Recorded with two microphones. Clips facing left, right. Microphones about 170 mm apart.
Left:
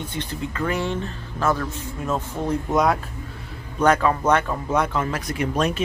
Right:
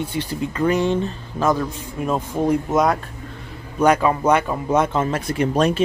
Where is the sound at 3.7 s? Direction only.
15° right (ahead or behind).